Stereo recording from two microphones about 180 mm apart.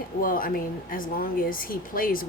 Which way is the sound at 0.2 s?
50° left (ahead or behind).